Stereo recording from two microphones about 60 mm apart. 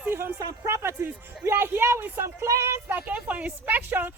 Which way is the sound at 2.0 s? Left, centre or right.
Right.